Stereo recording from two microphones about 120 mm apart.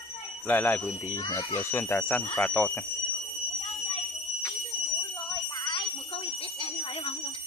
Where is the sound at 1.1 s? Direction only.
35° left (ahead or behind).